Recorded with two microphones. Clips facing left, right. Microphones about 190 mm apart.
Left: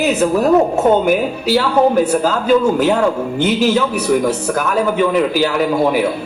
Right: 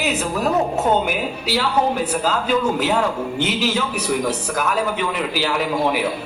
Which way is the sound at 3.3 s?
50° left (ahead or behind).